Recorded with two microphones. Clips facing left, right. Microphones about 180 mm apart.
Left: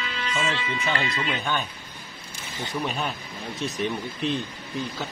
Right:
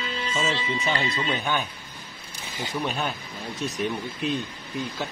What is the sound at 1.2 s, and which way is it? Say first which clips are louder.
Speech: right 1 dB; 5° right (ahead or behind).